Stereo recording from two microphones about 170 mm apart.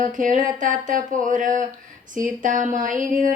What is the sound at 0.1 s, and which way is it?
Speech, 50° right (ahead or behind).